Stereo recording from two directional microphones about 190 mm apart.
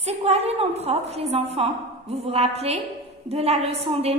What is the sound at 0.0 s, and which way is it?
A woman's voice, 35° right (ahead or behind).